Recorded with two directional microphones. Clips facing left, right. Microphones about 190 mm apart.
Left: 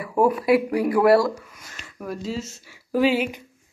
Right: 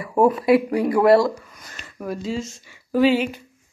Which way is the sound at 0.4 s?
25° right (ahead or behind).